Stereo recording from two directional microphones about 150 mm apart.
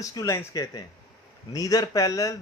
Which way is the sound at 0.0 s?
25° left (ahead or behind).